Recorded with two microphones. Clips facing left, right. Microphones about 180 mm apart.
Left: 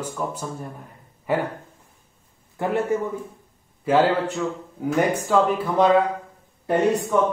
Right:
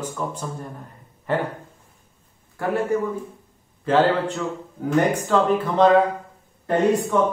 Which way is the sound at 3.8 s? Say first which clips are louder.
Even; 10° left (ahead or behind).